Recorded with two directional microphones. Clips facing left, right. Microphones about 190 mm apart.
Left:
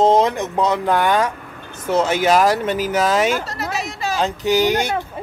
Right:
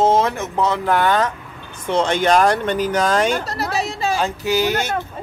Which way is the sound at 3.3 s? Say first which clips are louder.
Right 1 dB; 35° right (ahead or behind).